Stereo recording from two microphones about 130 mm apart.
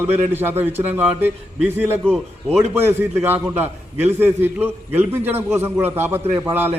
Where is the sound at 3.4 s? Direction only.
20° right (ahead or behind).